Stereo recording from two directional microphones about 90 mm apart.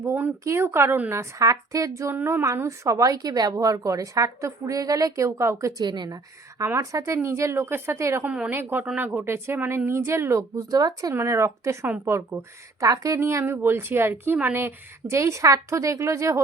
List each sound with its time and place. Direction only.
0.0 s a sound: 25° right (ahead or behind)
0.4 s a woman's voice: 30° right (ahead or behind)
5.8 s speech: 55° right (ahead or behind)
6.7 s a woman's voice: 35° right (ahead or behind)
8.2 s a woman's voice: 15° right (ahead or behind); by 11.1 s 45° right (ahead or behind)
11.1 s a woman's voice: 30° right (ahead or behind)